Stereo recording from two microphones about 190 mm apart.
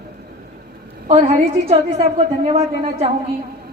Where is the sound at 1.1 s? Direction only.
30° right (ahead or behind).